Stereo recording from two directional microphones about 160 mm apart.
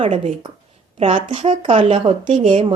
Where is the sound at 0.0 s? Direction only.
45° right (ahead or behind).